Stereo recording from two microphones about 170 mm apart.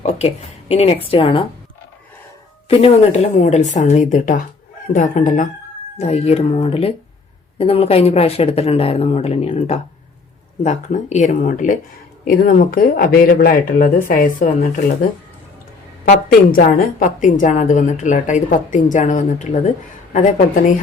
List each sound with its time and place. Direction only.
0.0 s a sound: 40° left (ahead or behind)
0.7 s speech: 35° left (ahead or behind)
2.6 s a woman's voice: 35° left (ahead or behind)
16.0 s a woman's voice: 55° left (ahead or behind)